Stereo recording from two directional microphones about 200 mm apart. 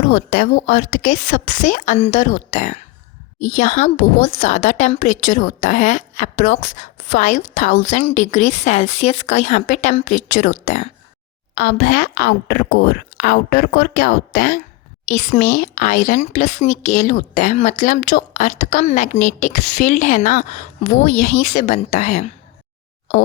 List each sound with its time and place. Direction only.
0.0 s a woman's voice: 40° left (ahead or behind)
11.5 s a woman's voice: 50° left (ahead or behind)